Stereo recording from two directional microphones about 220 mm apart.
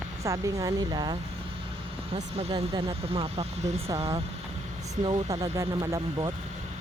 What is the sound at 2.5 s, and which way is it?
Speech, 20° right (ahead or behind).